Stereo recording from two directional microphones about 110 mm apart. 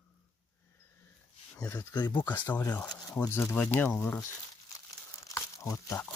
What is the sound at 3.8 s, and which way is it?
Speech, 10° left (ahead or behind).